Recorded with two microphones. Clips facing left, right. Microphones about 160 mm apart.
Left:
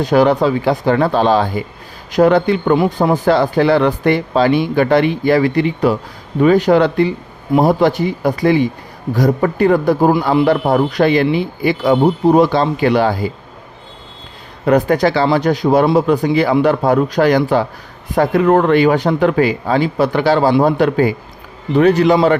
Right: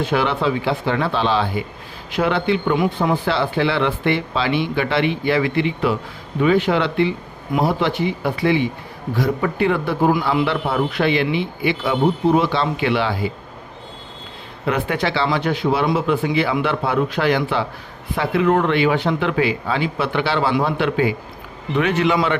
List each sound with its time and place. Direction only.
0.0 s a man's voice: 40° left (ahead or behind)
14.6 s a man's voice: 40° left (ahead or behind)